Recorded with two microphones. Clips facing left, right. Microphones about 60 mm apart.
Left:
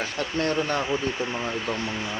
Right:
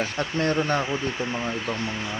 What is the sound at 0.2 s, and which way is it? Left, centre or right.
Speech, right.